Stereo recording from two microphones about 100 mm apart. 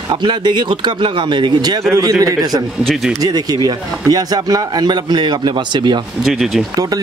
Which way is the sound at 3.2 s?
40° right (ahead or behind).